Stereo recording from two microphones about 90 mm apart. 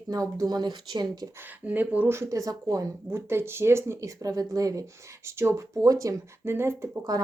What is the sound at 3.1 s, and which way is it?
Speech, 30° right (ahead or behind).